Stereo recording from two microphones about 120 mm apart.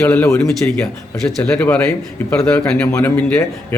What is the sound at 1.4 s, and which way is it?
Speech, 15° left (ahead or behind).